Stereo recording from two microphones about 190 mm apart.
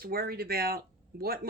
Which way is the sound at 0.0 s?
50° right (ahead or behind).